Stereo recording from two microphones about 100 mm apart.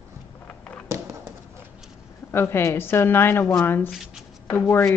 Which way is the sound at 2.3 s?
25° left (ahead or behind).